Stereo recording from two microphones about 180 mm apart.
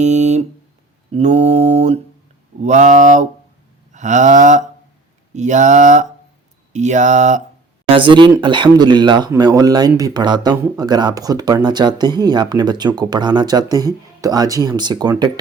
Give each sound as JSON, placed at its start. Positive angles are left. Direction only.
{"t": 0.0, "sound": "a sound", "side_deg": -40}
{"t": 1.1, "sound": "mantra", "side_deg": -35}
{"t": 2.6, "sound": "speech", "side_deg": -40}
{"t": 6.7, "sound": "mantra", "side_deg": -40}
{"t": 7.9, "sound": "speech", "side_deg": -30}